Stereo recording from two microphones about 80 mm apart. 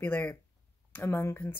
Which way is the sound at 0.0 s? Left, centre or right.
Left.